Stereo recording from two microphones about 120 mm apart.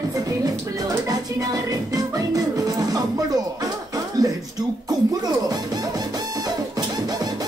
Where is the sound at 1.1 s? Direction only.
35° right (ahead or behind).